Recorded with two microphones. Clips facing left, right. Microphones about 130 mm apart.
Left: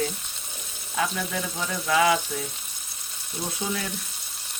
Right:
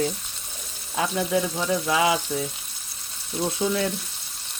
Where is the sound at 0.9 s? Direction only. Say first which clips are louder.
Right 4 dB; 20° right (ahead or behind).